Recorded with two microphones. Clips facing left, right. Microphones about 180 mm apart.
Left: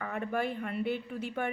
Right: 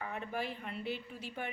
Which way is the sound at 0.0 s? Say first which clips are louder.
Left 6 dB; 50° left (ahead or behind).